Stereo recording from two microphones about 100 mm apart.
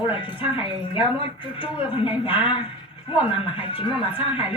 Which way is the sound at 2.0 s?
60° left (ahead or behind).